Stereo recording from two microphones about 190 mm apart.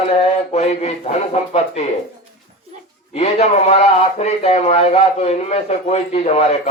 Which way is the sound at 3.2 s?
35° left (ahead or behind).